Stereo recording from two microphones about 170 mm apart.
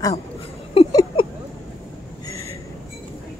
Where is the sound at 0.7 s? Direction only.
30° left (ahead or behind).